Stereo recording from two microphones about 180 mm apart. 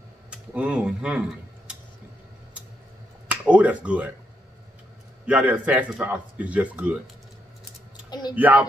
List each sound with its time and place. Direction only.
0.3 s speech: 5° right (ahead or behind)
3.3 s speech: 5° right (ahead or behind)
5.2 s a man's voice: 10° right (ahead or behind)
8.1 s a sound: 25° left (ahead or behind)
8.4 s a man's voice: 10° right (ahead or behind)